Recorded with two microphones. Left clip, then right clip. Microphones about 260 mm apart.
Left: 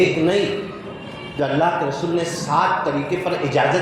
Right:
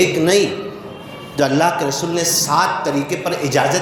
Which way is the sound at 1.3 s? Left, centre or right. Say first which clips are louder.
Right 4 dB; right.